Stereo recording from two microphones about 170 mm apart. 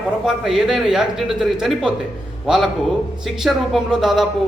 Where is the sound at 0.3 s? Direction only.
Centre (ahead or behind).